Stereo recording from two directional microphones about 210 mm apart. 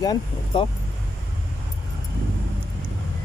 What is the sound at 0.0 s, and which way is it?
Speech, 20° left (ahead or behind).